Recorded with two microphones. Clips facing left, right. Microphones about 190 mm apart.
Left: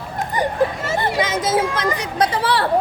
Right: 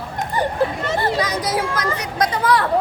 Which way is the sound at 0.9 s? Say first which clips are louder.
Left 1 dB; 25° left (ahead or behind).